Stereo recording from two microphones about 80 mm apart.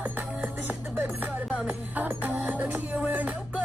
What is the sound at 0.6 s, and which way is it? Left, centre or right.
Music, centre.